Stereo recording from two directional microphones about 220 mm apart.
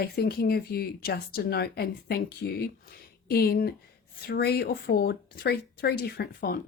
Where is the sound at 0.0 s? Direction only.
45° left (ahead or behind).